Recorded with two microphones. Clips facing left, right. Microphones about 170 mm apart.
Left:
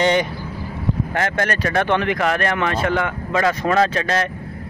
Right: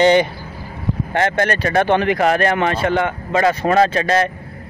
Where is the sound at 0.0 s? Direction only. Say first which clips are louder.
Right 5 dB; centre (ahead or behind).